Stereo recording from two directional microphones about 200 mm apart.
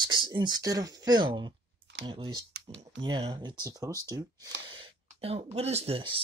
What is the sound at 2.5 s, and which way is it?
Computer keyboard, 65° right (ahead or behind).